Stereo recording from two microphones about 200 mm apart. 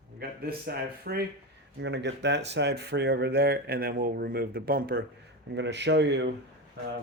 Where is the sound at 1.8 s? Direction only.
60° right (ahead or behind).